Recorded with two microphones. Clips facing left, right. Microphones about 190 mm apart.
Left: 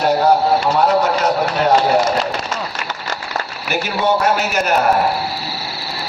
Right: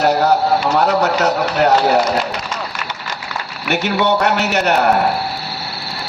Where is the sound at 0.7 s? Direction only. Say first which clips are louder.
Even; 70° right (ahead or behind).